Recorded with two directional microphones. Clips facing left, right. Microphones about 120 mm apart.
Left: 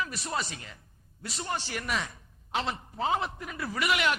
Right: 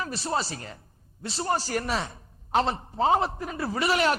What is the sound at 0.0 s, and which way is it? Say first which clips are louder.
A man's voice: right 4 dB; 30° right (ahead or behind).